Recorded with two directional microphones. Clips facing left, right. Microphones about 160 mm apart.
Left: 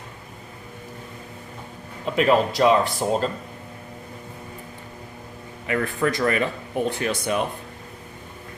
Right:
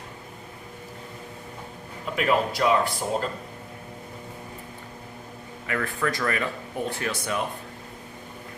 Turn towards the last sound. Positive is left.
turn(degrees=20)  # may be behind; listen again after turning